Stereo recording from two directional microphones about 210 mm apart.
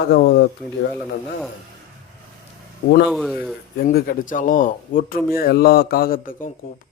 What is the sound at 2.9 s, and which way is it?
Speech, 50° left (ahead or behind).